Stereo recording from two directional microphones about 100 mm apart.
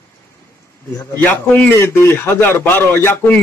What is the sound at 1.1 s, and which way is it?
A man's voice, 20° left (ahead or behind).